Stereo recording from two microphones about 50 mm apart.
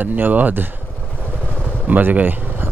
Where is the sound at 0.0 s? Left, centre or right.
Right.